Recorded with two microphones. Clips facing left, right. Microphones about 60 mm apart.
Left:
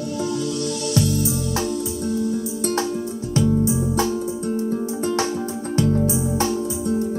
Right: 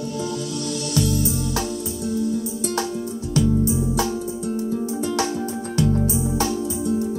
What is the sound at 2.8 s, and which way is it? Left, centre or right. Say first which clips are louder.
Music: left 2 dB; left.